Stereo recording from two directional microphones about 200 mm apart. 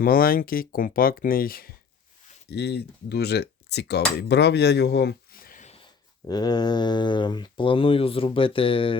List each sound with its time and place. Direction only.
0.0 s speech: 45° left (ahead or behind)
6.2 s speech: 20° left (ahead or behind)